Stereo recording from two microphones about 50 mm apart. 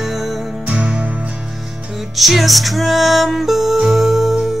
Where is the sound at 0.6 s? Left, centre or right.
Right.